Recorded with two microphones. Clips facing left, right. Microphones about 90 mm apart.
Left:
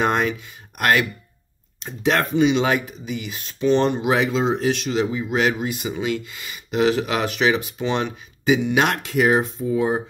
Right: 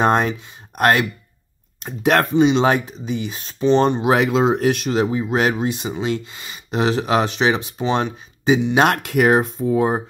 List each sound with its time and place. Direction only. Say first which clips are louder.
0.0 s speech: right 3 dB; 35° right (ahead or behind)
1.8 s speech: right 4 dB; 50° right (ahead or behind)
2.3 s speech: right 3 dB; 35° right (ahead or behind)
4.2 s speech: right 4 dB; 55° right (ahead or behind); by 8.8 s 35° right (ahead or behind)
8.8 s speech: right 3 dB; 55° right (ahead or behind)